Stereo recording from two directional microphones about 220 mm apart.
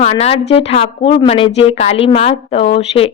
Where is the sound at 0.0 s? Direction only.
30° left (ahead or behind).